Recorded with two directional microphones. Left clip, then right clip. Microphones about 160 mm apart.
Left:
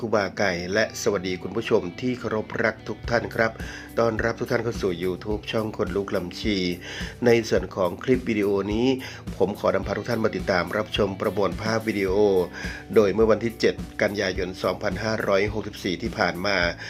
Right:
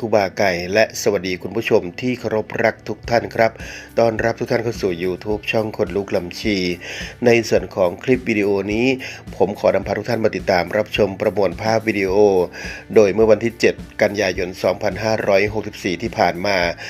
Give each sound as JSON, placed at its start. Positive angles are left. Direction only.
{"t": 0.1, "sound": "speech", "side_deg": -20}